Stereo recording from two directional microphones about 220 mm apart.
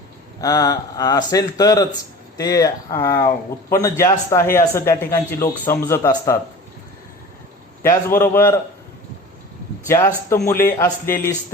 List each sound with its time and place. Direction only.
0.4 s speech: 15° left (ahead or behind)
7.8 s speech: 10° left (ahead or behind)
9.8 s speech: 10° left (ahead or behind)